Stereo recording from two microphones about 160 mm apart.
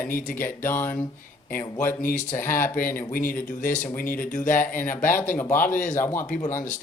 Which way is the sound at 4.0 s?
60° left (ahead or behind).